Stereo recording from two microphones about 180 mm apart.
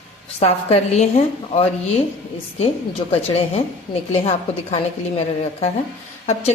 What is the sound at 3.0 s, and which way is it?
A woman's voice, 25° left (ahead or behind).